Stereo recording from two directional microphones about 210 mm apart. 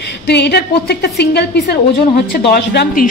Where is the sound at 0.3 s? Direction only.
50° left (ahead or behind).